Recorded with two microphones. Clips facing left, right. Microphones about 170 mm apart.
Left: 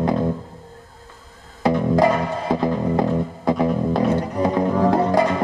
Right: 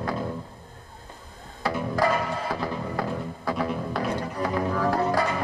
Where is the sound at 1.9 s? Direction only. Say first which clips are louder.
Left 4 dB; 20° left (ahead or behind).